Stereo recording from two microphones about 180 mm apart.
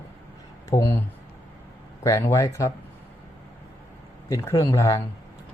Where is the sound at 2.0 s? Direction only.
20° left (ahead or behind).